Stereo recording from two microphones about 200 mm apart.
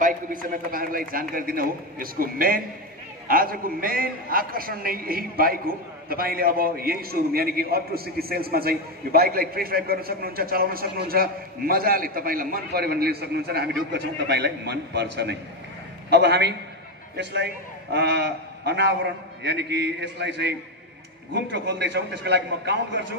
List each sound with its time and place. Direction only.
0.0 s a man's voice: 45° right (ahead or behind); by 23.0 s 60° right (ahead or behind)